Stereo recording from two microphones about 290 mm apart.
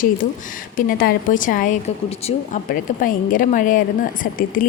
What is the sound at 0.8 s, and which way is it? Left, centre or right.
A woman's voice, left.